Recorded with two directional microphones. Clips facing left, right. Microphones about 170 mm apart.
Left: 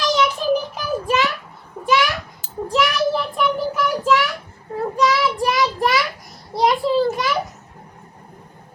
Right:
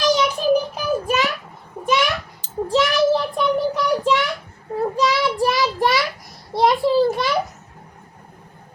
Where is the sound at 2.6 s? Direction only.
30° right (ahead or behind).